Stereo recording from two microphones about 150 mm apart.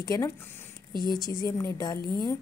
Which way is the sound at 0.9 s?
80° left.